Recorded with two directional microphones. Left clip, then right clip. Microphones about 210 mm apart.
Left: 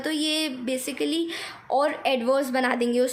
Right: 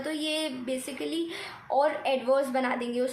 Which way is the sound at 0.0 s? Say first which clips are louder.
Left 4 dB; 50° left (ahead or behind).